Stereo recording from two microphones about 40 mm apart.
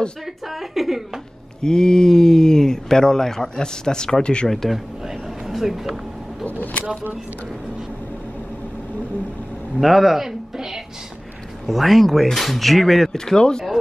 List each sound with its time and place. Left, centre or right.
0.5 s speech: centre
1.6 s speech: centre
4.5 s speech: centre
4.7 s a sound: centre
9.8 s speech: centre
13.2 s speech: centre